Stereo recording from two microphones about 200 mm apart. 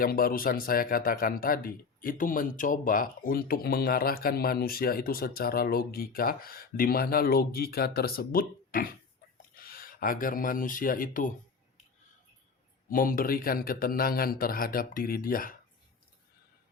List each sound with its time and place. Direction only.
0.0 s speech: 45° left (ahead or behind)
12.9 s speech: 45° left (ahead or behind)